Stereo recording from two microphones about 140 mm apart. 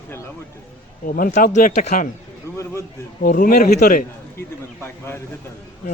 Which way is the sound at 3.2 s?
80° left.